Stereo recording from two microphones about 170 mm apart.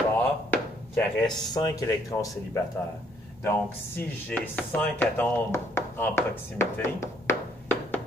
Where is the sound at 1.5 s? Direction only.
20° left (ahead or behind).